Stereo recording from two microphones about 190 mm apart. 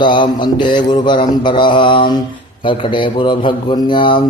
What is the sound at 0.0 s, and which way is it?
Mantra, 25° left (ahead or behind).